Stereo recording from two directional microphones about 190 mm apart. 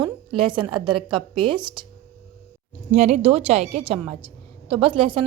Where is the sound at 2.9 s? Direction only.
35° right (ahead or behind).